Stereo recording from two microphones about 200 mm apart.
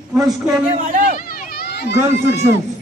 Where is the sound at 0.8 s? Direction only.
40° right (ahead or behind).